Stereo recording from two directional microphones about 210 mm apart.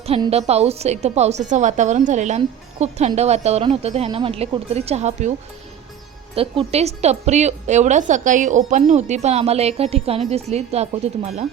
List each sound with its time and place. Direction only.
0.0 s a woman's voice: 30° right (ahead or behind)
6.3 s a woman's voice: 25° right (ahead or behind)